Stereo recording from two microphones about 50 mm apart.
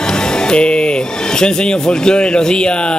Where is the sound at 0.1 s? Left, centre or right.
Centre.